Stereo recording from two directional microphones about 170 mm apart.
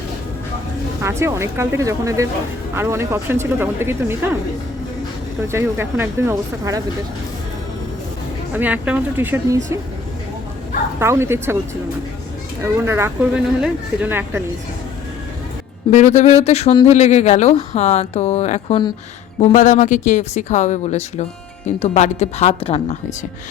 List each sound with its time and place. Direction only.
1.0 s speech: 15° right (ahead or behind)
5.5 s speech: 15° right (ahead or behind)
8.5 s speech: 10° right (ahead or behind)
11.0 s speech: 15° right (ahead or behind)
12.6 s speech: 15° right (ahead or behind)
15.9 s speech: 45° left (ahead or behind)